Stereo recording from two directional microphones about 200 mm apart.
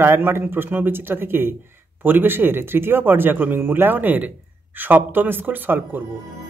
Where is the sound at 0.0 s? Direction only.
10° right (ahead or behind).